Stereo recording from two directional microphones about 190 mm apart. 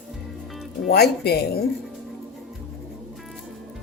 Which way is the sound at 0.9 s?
55° left (ahead or behind).